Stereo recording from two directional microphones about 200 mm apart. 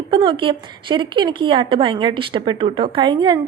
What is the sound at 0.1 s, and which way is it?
A woman's voice, 25° right (ahead or behind).